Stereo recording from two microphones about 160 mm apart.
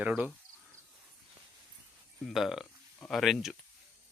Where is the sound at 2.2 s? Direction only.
Centre (ahead or behind).